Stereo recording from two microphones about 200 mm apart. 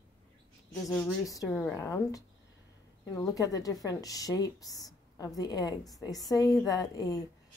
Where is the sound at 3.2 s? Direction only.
15° left (ahead or behind).